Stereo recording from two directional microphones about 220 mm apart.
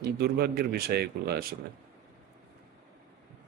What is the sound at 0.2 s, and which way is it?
Speech, 45° right (ahead or behind).